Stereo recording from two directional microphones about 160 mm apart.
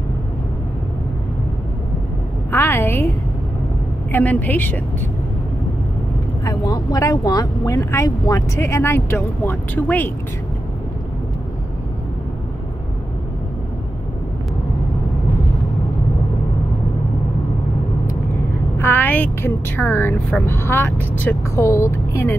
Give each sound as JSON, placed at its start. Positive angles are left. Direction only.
{"t": 2.5, "sound": "a sound", "side_deg": 15}
{"t": 4.1, "sound": "speech", "side_deg": 10}
{"t": 6.4, "sound": "speech", "side_deg": 20}
{"t": 18.8, "sound": "speech", "side_deg": 15}